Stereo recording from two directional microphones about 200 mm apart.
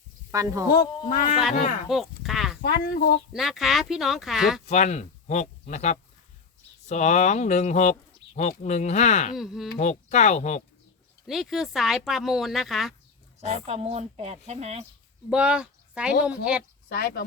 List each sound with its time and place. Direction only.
0.3 s speech: 15° right (ahead or behind)
1.0 s a child's voice: 45° left (ahead or behind)
1.9 s speech: centre (ahead or behind)
2.6 s a child's voice: 45° left (ahead or behind)
3.3 s speech: centre (ahead or behind)
4.6 s speech: 35° left (ahead or behind)
9.4 s speech: centre (ahead or behind)
9.7 s speech: 35° left (ahead or behind)
11.3 s speech: centre (ahead or behind)
13.4 s speech: 30° right (ahead or behind)
15.3 s speech: 5° right (ahead or behind)
16.9 s a child's voice: 50° left (ahead or behind)